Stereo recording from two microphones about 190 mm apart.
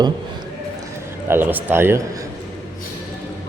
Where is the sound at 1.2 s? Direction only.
10° right (ahead or behind).